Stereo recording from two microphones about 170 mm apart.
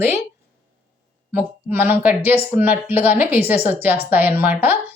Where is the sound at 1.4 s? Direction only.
10° right (ahead or behind).